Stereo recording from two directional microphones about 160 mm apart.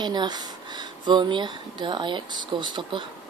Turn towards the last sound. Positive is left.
turn(degrees=-30)  # may be behind; listen again after turning